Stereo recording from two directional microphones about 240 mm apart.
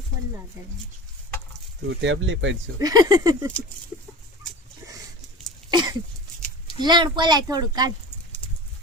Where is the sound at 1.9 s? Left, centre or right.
Right.